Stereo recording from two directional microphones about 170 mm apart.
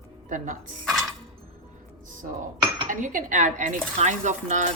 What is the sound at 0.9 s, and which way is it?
Music, centre (ahead or behind).